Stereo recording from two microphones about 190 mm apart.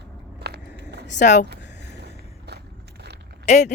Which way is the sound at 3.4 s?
35° left (ahead or behind).